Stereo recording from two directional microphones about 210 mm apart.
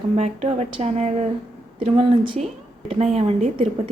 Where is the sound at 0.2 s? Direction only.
30° right (ahead or behind).